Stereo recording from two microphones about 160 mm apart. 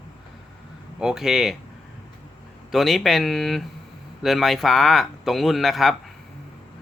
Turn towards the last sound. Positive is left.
turn(degrees=0)  # may be behind; listen again after turning